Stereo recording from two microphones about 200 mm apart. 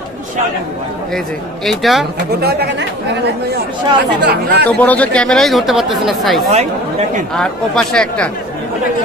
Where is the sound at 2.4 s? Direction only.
55° right (ahead or behind).